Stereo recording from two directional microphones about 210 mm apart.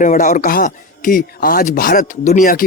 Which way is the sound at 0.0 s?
35° left (ahead or behind).